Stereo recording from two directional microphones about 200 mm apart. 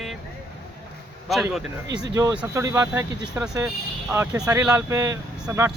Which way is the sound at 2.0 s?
20° right (ahead or behind).